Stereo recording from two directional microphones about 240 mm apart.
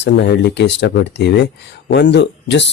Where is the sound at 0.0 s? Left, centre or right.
Left.